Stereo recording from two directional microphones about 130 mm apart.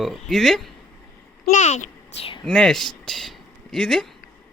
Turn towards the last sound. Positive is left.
turn(degrees=0)  # may be behind; listen again after turning